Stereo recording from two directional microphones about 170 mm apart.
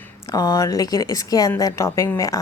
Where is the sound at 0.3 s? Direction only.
20° left (ahead or behind).